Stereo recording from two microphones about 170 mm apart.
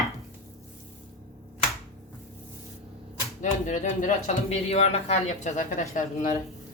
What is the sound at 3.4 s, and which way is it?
A woman's voice, 45° left (ahead or behind).